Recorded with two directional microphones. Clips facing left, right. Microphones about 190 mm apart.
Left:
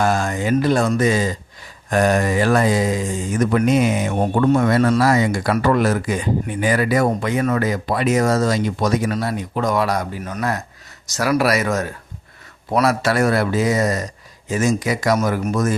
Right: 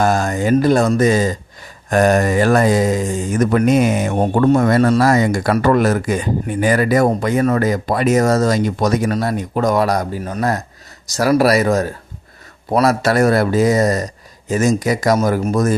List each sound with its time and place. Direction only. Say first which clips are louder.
0.0 s speech: right 3 dB; 40° right (ahead or behind)